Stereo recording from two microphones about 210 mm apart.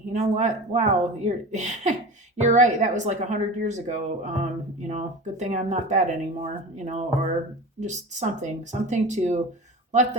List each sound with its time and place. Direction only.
0.1 s a woman's voice: 35° right (ahead or behind)